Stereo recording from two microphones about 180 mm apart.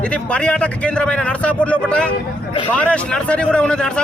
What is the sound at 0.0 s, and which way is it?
Speech, 5° left (ahead or behind).